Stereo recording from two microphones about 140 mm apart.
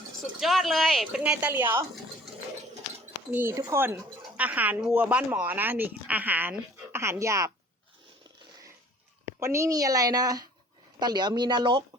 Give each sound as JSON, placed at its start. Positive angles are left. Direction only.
{"t": 0.3, "sound": "speech", "side_deg": 0}
{"t": 3.3, "sound": "speech", "side_deg": -15}
{"t": 9.2, "sound": "a woman's voice", "side_deg": -20}